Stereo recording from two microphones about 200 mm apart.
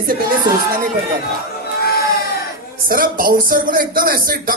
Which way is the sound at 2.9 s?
45° right (ahead or behind).